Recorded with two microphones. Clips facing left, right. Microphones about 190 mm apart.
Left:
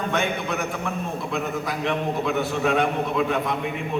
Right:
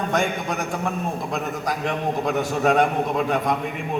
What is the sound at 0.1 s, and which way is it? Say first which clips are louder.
A man's voice: right 1 dB; 40° right (ahead or behind).